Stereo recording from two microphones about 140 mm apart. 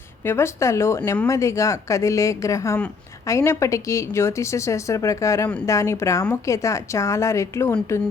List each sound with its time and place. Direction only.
0.3 s speech: 20° left (ahead or behind)